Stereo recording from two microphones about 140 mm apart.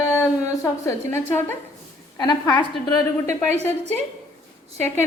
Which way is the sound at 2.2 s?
30° left (ahead or behind).